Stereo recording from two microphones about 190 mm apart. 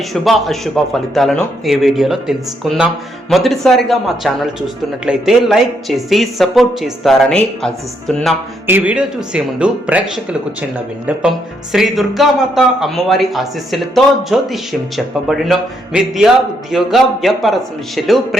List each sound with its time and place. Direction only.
0.1 s speech: centre (ahead or behind)